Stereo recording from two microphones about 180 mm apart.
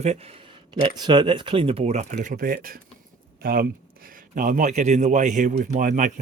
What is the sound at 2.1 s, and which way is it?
A man's voice, 50° right (ahead or behind).